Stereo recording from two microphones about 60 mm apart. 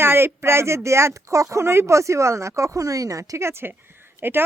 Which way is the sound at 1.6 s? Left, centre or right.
Right.